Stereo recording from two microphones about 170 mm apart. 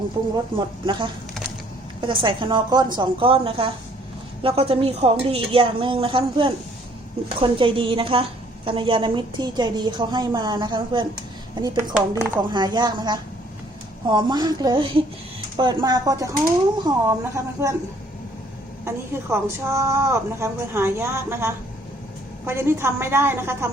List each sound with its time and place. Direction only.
0.5 s a woman's voice: 30° right (ahead or behind)
18.9 s speech: 15° right (ahead or behind)